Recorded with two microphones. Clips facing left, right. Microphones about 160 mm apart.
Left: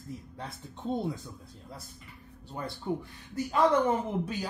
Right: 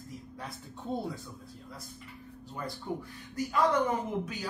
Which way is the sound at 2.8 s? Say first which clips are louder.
Left 3 dB; 25° left (ahead or behind).